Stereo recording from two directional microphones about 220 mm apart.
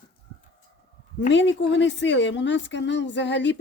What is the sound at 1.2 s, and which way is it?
A woman's voice, 55° left (ahead or behind).